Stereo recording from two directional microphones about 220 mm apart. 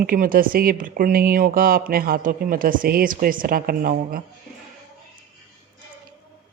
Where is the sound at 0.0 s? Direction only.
40° right (ahead or behind).